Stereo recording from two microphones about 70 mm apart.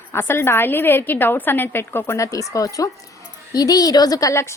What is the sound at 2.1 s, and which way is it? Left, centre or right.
A woman's voice, left.